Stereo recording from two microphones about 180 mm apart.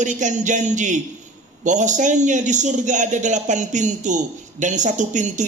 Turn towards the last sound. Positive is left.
turn(degrees=-40)  # may be behind; listen again after turning